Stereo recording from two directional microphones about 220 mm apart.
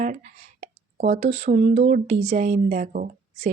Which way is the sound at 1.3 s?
30° right (ahead or behind).